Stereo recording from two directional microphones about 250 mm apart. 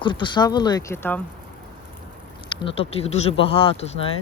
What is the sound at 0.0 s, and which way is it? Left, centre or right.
Speech, centre.